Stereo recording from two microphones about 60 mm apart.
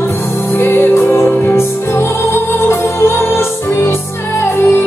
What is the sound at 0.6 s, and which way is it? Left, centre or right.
Music, left.